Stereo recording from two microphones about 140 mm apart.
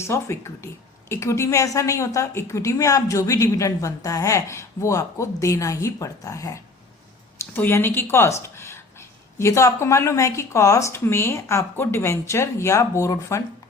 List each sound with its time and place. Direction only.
0.1 s a woman's voice: 20° left (ahead or behind)